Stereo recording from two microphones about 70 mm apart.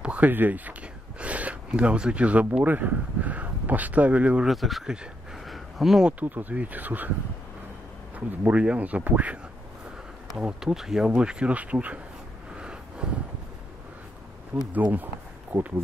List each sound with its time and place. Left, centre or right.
0.0 s speech: right
4.5 s speech: centre
5.4 s a sound: centre
6.0 s speech: right
8.3 s speech: centre
10.3 s speech: centre
12.5 s vehicle: centre
14.7 s speech: right